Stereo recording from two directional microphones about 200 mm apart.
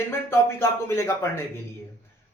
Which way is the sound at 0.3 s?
10° left (ahead or behind).